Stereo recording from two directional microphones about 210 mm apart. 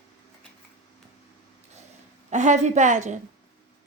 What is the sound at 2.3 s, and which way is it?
Speech, 35° right (ahead or behind).